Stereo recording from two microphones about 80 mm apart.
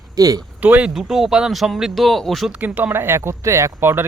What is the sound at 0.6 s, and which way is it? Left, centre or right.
Speech, centre.